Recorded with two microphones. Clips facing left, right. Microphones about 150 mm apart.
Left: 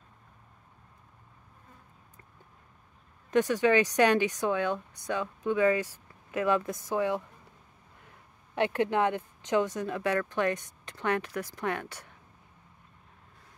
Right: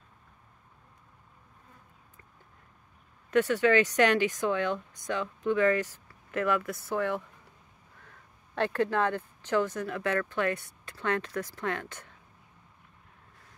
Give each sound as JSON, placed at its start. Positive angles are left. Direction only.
{"t": 3.3, "sound": "a woman's voice", "side_deg": 15}